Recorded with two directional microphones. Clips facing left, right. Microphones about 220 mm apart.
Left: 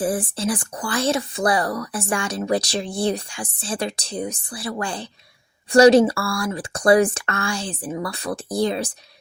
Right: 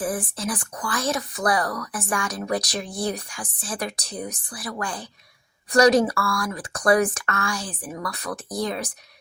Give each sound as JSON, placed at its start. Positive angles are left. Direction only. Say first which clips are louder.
{"t": 0.0, "sound": "speech", "louder": "left 4 dB", "side_deg": 30}